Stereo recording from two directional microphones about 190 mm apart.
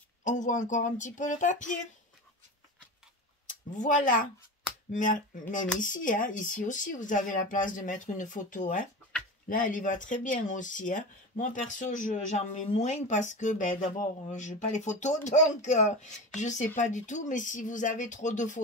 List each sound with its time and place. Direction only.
0.2 s speech: 40° left (ahead or behind)
3.4 s speech: 40° left (ahead or behind)